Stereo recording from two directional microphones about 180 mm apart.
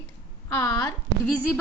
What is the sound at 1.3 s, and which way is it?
Speech, 10° right (ahead or behind).